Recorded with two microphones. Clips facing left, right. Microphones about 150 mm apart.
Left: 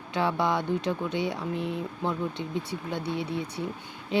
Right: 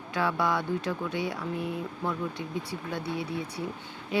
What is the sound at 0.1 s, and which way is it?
Speech, 25° left (ahead or behind).